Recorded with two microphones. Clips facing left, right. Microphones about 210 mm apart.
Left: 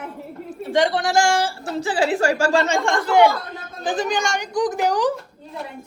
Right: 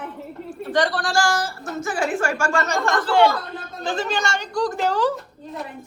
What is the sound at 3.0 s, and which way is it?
Speech, 10° left (ahead or behind).